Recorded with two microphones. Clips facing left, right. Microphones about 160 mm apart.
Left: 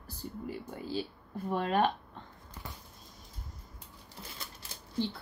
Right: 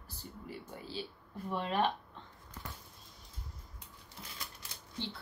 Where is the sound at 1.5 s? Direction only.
50° left (ahead or behind).